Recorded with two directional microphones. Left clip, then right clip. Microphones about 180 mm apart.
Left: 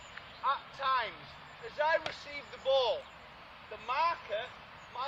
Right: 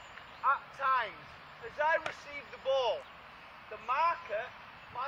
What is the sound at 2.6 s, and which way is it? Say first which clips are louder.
Speech: left 2 dB; 20° right (ahead or behind).